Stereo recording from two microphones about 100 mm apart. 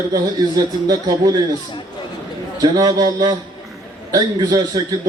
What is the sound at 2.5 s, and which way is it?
A man's voice, 40° right (ahead or behind).